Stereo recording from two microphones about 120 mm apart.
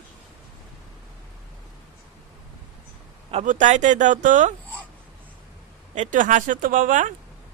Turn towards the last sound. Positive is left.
turn(degrees=-90)